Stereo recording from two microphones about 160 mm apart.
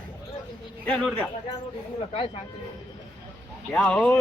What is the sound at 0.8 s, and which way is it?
Speech, 5° left (ahead or behind).